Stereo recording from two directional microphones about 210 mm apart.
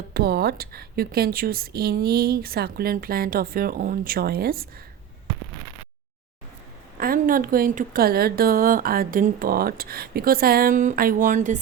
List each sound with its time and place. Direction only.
0.1 s a woman's voice: 50° right (ahead or behind)
7.0 s a woman's voice: 40° right (ahead or behind)